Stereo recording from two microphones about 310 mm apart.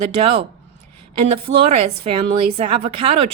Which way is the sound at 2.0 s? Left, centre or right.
Centre.